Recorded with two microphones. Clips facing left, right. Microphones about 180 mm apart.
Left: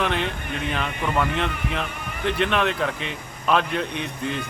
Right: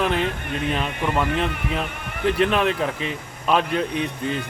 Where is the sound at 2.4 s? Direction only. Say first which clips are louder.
Right 2 dB; 35° right (ahead or behind).